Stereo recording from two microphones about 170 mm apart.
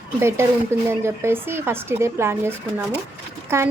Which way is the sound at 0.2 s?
15° right (ahead or behind).